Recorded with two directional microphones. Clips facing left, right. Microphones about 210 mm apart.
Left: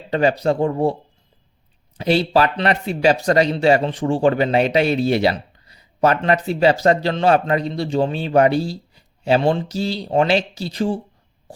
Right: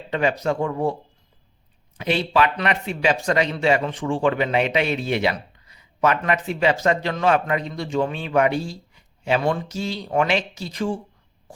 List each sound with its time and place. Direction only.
0.1 s speech: 35° left (ahead or behind)
2.0 s speech: 35° left (ahead or behind)